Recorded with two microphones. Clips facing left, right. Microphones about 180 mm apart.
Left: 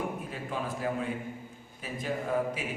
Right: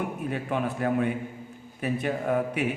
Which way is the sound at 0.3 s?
65° right (ahead or behind).